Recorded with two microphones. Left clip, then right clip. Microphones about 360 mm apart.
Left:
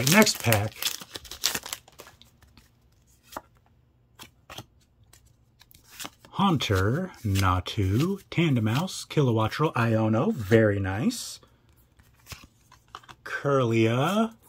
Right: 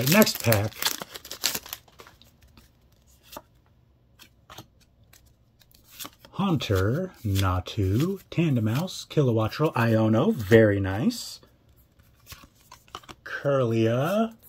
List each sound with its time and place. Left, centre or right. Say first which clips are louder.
0.1 s speech: even; centre
1.7 s crumpling: left 2 dB; left
5.6 s speech: left 1 dB; centre
12.7 s a sound: right 3 dB; right
13.3 s speech: even; centre